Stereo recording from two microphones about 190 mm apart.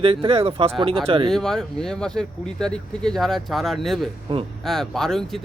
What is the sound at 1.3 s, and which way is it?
Speech, 5° left (ahead or behind).